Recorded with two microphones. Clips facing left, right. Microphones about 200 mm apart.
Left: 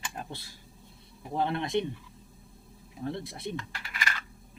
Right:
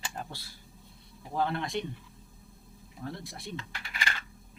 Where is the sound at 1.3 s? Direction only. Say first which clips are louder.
Left 2 dB; 20° left (ahead or behind).